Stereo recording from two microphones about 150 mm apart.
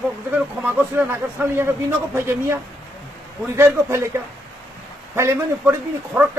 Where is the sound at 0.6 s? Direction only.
15° right (ahead or behind).